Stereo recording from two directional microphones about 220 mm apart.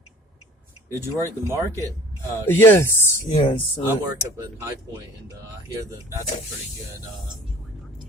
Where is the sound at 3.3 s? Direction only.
20° left (ahead or behind).